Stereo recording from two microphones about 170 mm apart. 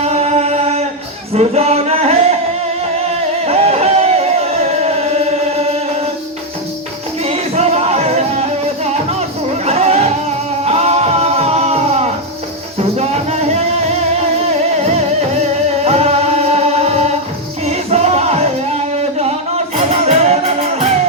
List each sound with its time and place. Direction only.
0.0 s a sound: 40° right (ahead or behind)
1.3 s music: 40° right (ahead or behind)
3.4 s music: 40° right (ahead or behind)
7.2 s music: 40° right (ahead or behind)
9.6 s a sound: 40° right (ahead or behind)
10.7 s music: 40° right (ahead or behind)
15.8 s music: 40° right (ahead or behind)
20.1 s music: 40° right (ahead or behind)